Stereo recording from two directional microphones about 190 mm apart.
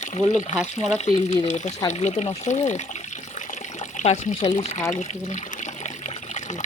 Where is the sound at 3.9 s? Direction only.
35° left (ahead or behind).